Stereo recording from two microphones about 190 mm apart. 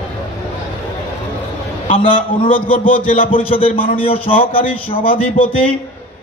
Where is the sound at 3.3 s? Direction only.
30° left (ahead or behind).